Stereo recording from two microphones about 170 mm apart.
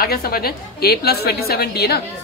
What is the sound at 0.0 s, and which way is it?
A woman's voice, 65° left (ahead or behind).